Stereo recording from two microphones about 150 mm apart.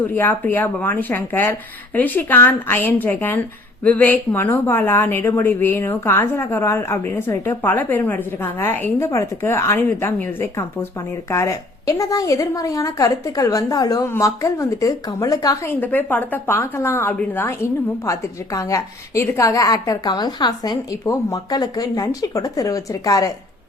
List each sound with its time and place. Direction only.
0.0 s a woman's voice: 10° left (ahead or behind)
15.7 s a woman's voice: 10° left (ahead or behind)